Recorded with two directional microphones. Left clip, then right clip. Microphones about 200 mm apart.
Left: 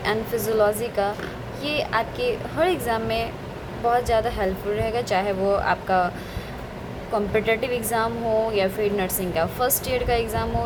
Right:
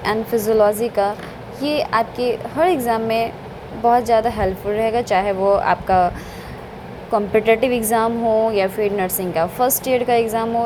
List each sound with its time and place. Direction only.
0.0 s a woman's voice: 15° right (ahead or behind)
7.1 s a woman's voice: 20° right (ahead or behind)